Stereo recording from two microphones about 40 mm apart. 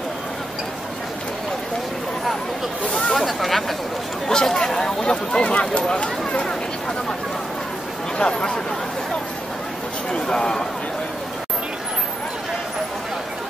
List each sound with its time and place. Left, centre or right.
2.9 s speech: centre
4.3 s speech: centre
8.2 s speech: left
10.1 s speech: centre